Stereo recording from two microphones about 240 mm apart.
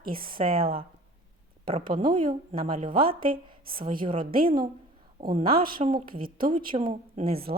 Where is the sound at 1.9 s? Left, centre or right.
Right.